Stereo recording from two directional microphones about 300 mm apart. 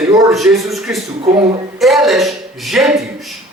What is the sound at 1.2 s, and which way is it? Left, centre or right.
Speech, centre.